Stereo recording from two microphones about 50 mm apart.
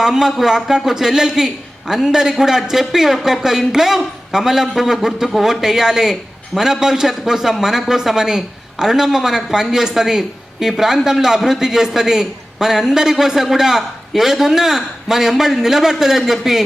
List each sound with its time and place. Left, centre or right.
0.0 s a man's voice: centre